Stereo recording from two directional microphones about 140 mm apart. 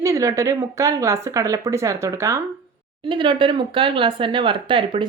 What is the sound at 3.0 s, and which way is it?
Speech, 35° right (ahead or behind).